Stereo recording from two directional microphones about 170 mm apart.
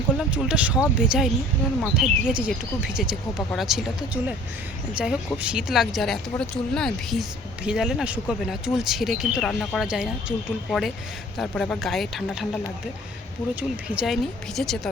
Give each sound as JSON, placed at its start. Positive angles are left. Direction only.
{"t": 0.2, "sound": "speech", "side_deg": -5}
{"t": 13.6, "sound": "speech", "side_deg": -5}